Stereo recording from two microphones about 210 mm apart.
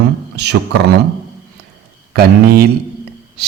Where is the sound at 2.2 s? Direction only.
50° right (ahead or behind).